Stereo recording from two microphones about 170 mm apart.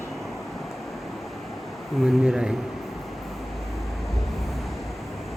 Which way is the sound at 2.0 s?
5° right (ahead or behind).